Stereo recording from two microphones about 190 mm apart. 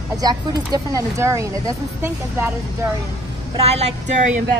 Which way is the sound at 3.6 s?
35° right (ahead or behind).